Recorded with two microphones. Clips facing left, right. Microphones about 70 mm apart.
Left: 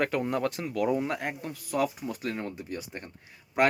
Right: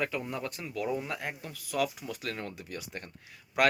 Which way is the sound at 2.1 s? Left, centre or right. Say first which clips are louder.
Left 4 dB; left.